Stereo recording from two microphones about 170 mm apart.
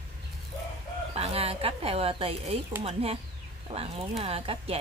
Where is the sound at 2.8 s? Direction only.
35° right (ahead or behind).